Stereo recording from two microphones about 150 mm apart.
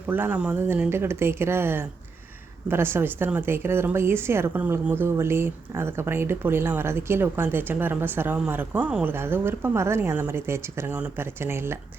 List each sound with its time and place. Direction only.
0.1 s a woman's voice: 10° right (ahead or behind)